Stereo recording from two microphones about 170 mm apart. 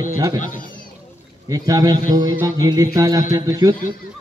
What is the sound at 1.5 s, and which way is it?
Music, 20° right (ahead or behind).